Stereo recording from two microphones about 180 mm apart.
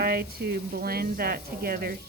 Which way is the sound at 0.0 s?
60° right (ahead or behind).